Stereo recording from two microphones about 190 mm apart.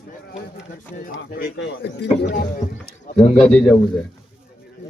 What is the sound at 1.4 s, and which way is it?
Speech, 60° left (ahead or behind).